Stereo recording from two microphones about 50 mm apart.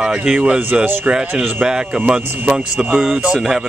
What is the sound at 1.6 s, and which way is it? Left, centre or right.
Speech, centre.